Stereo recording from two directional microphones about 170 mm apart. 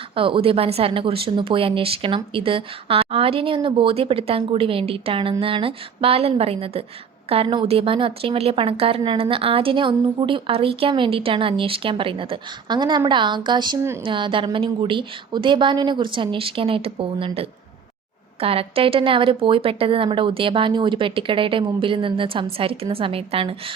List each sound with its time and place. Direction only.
0.2 s a woman's voice: 30° right (ahead or behind)